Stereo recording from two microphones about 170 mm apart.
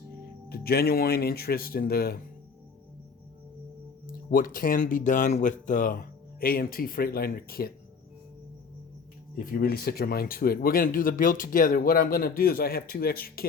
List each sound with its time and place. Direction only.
0.4 s speech: 65° left (ahead or behind)
4.0 s speech: 55° left (ahead or behind)
9.4 s speech: 60° left (ahead or behind)